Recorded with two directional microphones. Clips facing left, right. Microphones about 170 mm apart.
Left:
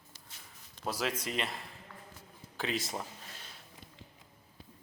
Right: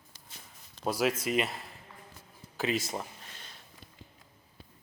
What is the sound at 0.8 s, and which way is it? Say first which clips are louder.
Speech: right 6 dB; 10° right (ahead or behind).